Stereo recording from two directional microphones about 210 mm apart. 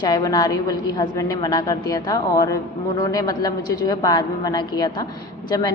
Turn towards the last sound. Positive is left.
turn(degrees=15)  # may be behind; listen again after turning